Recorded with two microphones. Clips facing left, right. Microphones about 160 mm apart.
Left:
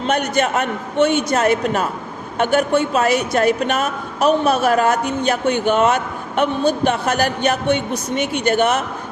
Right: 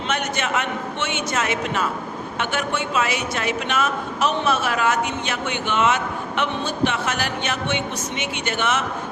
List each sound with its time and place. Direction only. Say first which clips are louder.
0.1 s speech: left 6 dB; 40° left (ahead or behind)